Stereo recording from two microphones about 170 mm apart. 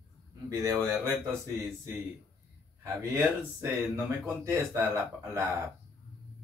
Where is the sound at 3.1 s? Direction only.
15° right (ahead or behind).